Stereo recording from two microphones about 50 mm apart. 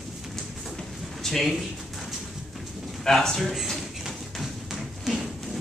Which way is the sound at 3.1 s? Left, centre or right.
Centre.